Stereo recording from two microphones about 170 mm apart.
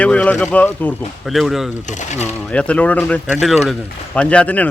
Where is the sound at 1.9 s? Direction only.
45° left (ahead or behind).